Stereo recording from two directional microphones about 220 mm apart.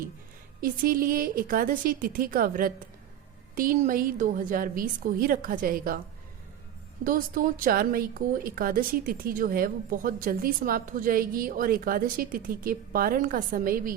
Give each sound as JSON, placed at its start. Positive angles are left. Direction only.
{"t": 0.6, "sound": "a woman's voice", "side_deg": -40}
{"t": 7.0, "sound": "a woman's voice", "side_deg": -40}